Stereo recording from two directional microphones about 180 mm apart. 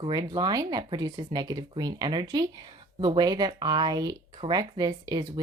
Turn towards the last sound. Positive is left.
turn(degrees=-20)  # may be behind; listen again after turning